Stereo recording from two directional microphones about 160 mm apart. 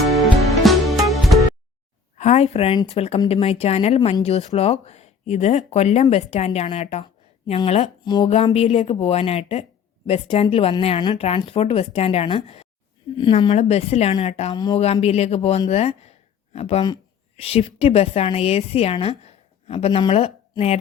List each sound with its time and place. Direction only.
0.6 s music: centre (ahead or behind)
2.1 s speech: 45° left (ahead or behind)
14.5 s speech: 25° left (ahead or behind)
15.0 s a woman's voice: 40° left (ahead or behind)